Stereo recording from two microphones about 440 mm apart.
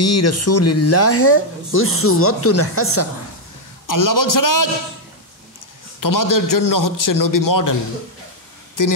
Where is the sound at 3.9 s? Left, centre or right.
Left.